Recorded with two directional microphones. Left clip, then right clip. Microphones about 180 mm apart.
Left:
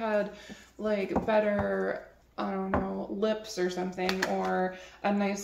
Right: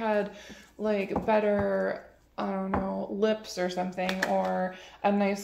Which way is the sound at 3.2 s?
30° right (ahead or behind).